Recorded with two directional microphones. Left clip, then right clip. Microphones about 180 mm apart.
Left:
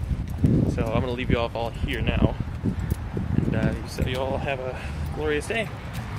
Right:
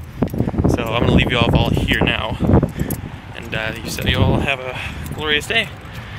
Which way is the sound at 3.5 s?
10° right (ahead or behind).